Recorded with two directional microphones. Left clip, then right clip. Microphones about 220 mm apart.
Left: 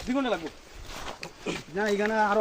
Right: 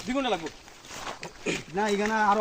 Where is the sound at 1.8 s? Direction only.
55° right (ahead or behind).